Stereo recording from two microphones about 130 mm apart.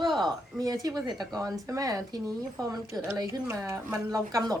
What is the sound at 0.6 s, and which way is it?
A woman's voice, 30° right (ahead or behind).